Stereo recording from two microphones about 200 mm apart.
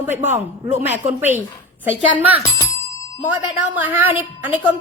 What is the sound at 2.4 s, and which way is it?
Bicycle bell, 15° left (ahead or behind).